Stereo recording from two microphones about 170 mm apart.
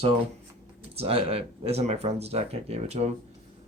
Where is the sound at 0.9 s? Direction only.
35° right (ahead or behind).